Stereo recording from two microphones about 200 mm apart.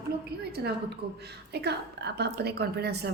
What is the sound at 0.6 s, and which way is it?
A woman's voice, 55° right (ahead or behind).